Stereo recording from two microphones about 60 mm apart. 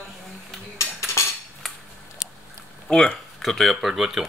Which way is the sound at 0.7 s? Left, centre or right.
Left.